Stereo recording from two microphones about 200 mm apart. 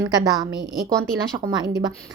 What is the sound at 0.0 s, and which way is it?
Speech, 20° right (ahead or behind).